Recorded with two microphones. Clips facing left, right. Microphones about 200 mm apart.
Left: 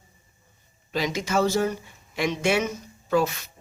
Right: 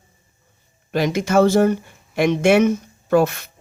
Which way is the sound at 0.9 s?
55° right (ahead or behind).